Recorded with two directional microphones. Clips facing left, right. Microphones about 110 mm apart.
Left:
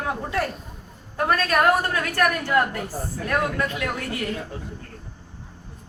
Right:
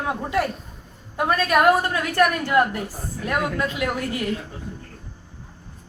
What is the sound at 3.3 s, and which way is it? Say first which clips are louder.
Speech: even; 20° right (ahead or behind).